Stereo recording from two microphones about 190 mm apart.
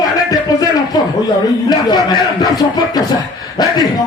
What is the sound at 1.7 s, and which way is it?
Speech, 20° left (ahead or behind).